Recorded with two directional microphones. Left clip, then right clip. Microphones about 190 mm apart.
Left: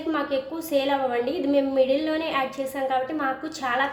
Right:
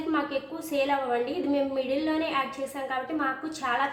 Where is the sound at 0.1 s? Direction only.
30° left (ahead or behind).